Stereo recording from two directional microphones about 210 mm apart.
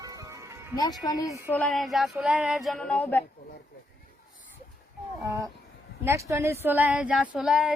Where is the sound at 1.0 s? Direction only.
15° left (ahead or behind).